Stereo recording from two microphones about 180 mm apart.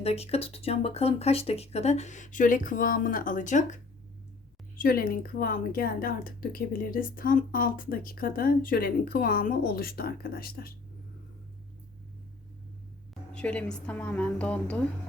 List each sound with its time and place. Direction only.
0.0 s speech: 35° left (ahead or behind)
4.8 s a woman's voice: 55° left (ahead or behind)
13.3 s a woman's voice: 5° left (ahead or behind)